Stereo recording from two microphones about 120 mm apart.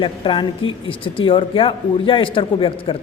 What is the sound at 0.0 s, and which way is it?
A man's voice, 45° left (ahead or behind).